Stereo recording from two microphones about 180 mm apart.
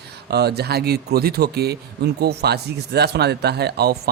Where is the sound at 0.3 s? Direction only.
65° right (ahead or behind).